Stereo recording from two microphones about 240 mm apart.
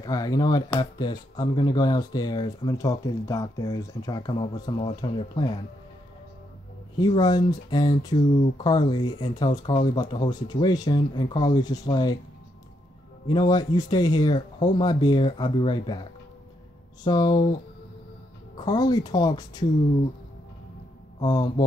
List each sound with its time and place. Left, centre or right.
0.0 s speech: centre
7.0 s speech: centre
13.3 s speech: centre
18.6 s speech: centre
21.2 s speech: centre